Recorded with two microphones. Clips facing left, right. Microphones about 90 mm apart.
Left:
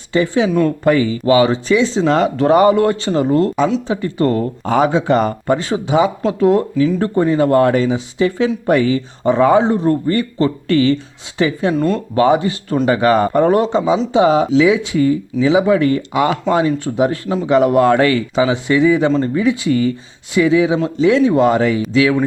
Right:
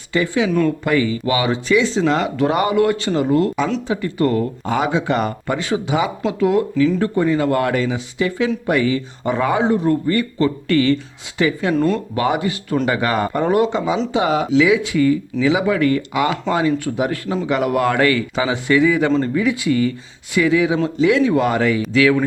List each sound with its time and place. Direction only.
0.1 s speech: 30° left (ahead or behind)
11.7 s speech: centre (ahead or behind)
12.1 s speech: 30° left (ahead or behind)